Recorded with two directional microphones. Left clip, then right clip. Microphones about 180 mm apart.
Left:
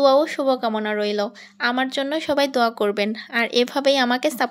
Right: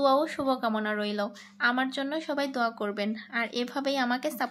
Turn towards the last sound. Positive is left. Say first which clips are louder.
# left 9 dB
turn(degrees=40)  # may be behind; listen again after turning